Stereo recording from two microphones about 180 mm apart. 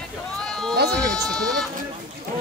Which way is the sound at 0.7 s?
65° right (ahead or behind).